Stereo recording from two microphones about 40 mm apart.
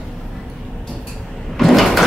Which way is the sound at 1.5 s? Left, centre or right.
Centre.